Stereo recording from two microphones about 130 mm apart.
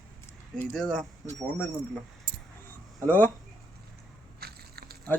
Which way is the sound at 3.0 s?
15° left (ahead or behind).